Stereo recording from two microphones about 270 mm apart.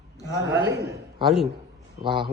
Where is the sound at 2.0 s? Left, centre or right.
Centre.